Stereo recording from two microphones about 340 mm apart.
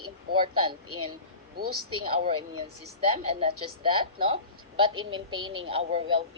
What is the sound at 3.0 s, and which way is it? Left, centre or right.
Speech, centre.